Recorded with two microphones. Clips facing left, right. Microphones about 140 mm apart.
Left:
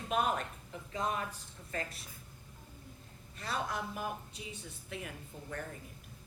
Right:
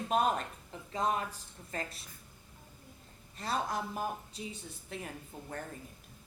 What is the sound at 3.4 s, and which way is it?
A woman's voice, 35° right (ahead or behind).